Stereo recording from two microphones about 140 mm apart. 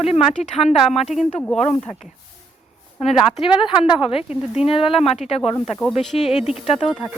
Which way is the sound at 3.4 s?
35° left (ahead or behind).